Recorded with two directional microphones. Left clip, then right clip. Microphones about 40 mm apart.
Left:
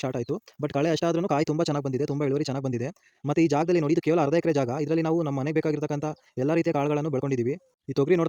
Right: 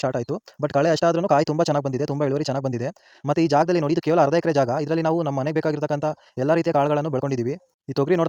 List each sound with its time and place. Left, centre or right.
0.0 s speech: right
1.3 s speech: right
2.8 s speech: centre